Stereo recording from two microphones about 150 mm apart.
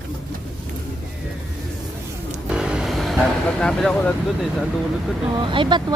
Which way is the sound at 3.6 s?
5° left (ahead or behind).